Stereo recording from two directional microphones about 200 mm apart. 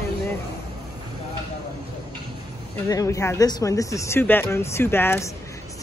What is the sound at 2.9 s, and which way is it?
Speech, 15° left (ahead or behind).